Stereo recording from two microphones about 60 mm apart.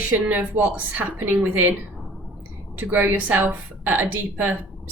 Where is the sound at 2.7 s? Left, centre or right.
Right.